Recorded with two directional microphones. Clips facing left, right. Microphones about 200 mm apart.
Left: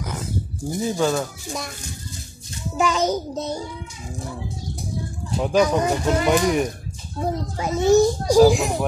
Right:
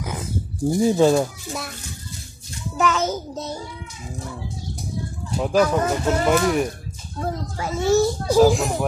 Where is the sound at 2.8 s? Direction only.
15° left (ahead or behind).